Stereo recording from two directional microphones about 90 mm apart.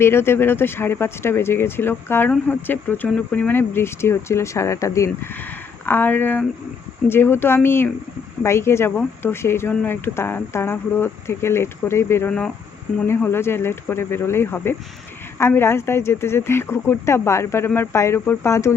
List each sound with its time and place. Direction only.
0.0 s speech: 30° left (ahead or behind)